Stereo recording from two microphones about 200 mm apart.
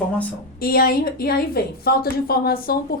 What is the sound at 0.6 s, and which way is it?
A woman's voice, 50° left (ahead or behind).